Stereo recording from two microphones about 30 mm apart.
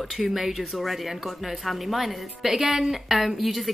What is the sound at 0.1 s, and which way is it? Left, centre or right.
Speech, centre.